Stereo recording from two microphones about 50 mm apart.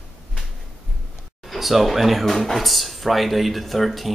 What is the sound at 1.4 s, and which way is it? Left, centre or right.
Speech, centre.